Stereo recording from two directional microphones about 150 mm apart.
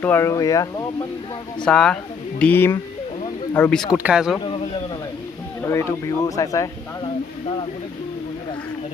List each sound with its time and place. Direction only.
0.0 s speech: 15° left (ahead or behind)
1.6 s speech: 5° left (ahead or behind)
3.9 s speech: 10° right (ahead or behind)
4.4 s a sound: 40° left (ahead or behind)
5.6 s speech: 20° left (ahead or behind)